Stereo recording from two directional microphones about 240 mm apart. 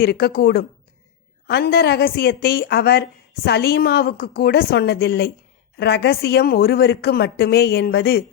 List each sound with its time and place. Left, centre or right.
0.0 s a woman's voice: left